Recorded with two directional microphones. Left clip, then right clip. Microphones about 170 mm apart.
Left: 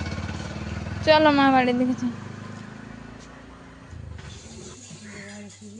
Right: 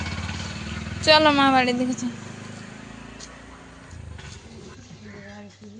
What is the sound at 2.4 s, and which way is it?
Vehicle, 35° left (ahead or behind).